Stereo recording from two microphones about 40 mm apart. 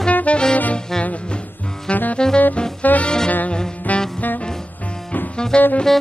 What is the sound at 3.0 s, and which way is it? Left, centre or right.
Saxophone, centre.